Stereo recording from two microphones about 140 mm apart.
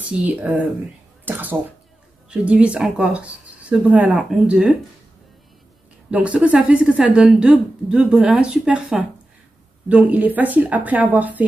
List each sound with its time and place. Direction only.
0.2 s a woman's voice: 10° right (ahead or behind)
6.0 s a woman's voice: 10° right (ahead or behind)